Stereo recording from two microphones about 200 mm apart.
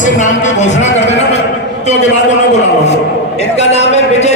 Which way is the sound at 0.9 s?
35° left (ahead or behind).